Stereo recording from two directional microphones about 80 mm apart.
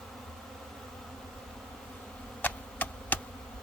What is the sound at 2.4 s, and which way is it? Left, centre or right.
Insect, left.